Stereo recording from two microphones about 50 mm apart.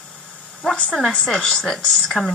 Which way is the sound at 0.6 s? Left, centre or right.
Centre.